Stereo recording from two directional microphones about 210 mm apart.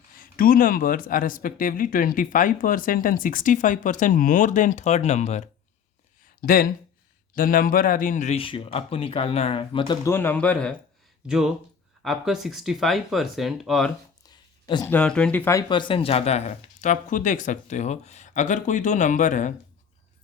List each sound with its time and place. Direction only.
0.2 s speech: 40° left (ahead or behind)
6.4 s speech: 45° left (ahead or behind); by 13.9 s centre (ahead or behind)
14.3 s a sound: 20° left (ahead or behind)
14.9 s speech: 5° left (ahead or behind); by 19.5 s 35° left (ahead or behind)